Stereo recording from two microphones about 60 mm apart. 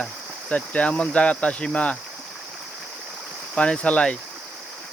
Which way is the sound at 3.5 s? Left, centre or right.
Centre.